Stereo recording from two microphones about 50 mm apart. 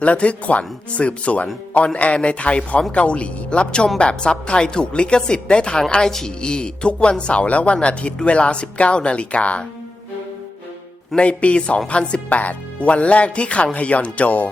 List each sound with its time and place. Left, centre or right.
0.0 s speech: left
11.1 s speech: left